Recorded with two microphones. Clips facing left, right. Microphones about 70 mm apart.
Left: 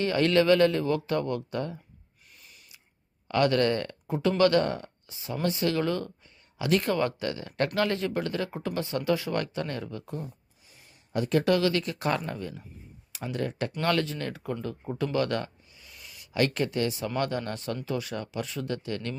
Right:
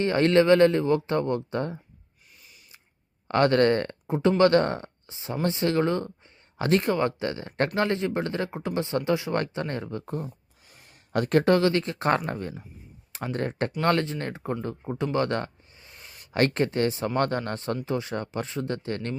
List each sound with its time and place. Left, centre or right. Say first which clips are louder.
0.0 s speech: right 3 dB; right
3.2 s speech: right 3 dB; right
4.0 s speech: right 3 dB; right
10.7 s a sound: right 5 dB; right
11.4 s speech: right 3 dB; right
14.8 s speech: right 1 dB; right